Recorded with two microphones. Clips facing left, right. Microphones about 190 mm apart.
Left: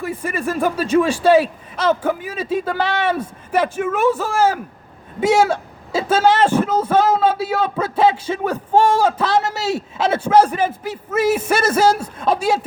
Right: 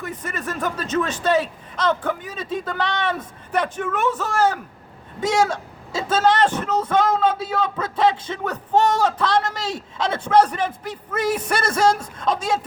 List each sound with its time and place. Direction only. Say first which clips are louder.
0.0 s a man's voice: left 6 dB; 10° left (ahead or behind)
11.5 s speech: left 5 dB; 25° left (ahead or behind)
11.8 s a man's voice: left 3 dB; 5° left (ahead or behind)